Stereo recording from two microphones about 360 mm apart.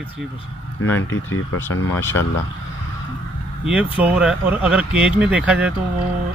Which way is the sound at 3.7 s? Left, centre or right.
Centre.